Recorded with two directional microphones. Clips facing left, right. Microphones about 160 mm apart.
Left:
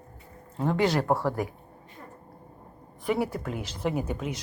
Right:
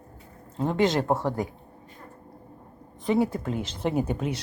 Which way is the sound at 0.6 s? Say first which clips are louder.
Right 1 dB; 20° right (ahead or behind).